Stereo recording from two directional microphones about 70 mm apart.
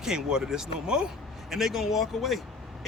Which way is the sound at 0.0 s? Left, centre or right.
Centre.